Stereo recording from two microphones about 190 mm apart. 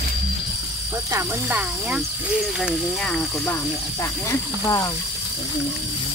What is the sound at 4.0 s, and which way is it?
Speech, 15° left (ahead or behind).